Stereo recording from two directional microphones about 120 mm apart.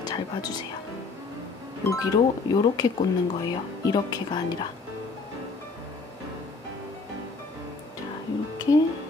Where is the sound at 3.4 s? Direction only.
35° left (ahead or behind).